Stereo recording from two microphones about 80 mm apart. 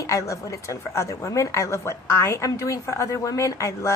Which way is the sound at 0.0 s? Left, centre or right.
Left.